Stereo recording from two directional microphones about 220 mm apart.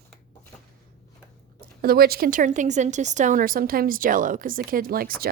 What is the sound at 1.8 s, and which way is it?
A woman's voice, 45° right (ahead or behind).